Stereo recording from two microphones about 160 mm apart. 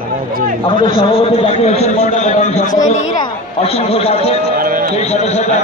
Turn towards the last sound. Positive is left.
turn(degrees=45)  # may be behind; listen again after turning